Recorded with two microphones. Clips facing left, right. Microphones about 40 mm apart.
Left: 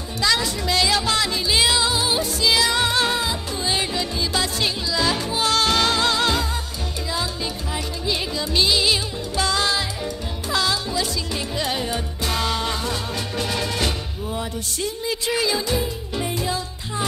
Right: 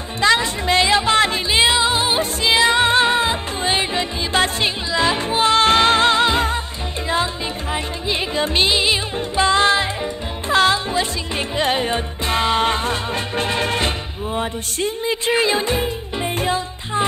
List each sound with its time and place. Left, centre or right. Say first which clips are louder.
0.2 s music: right 5 dB; right
7.7 s music: right 3 dB; right